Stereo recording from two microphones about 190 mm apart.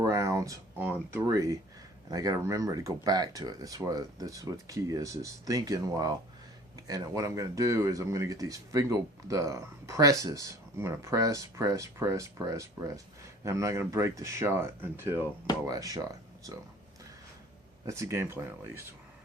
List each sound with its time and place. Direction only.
0.0 s speech: 15° right (ahead or behind)
17.8 s speech: 15° right (ahead or behind)